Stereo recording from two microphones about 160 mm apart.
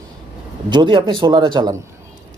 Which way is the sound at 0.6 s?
30° right (ahead or behind).